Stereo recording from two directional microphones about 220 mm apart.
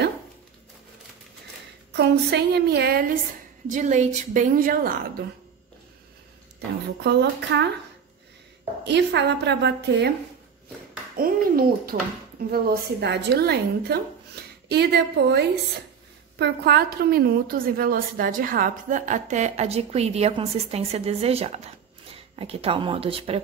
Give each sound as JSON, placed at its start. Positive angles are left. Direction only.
{"t": 1.9, "sound": "a woman's voice", "side_deg": -50}
{"t": 7.0, "sound": "a woman's voice", "side_deg": -50}
{"t": 8.8, "sound": "a woman's voice", "side_deg": -50}
{"t": 11.1, "sound": "a woman's voice", "side_deg": -40}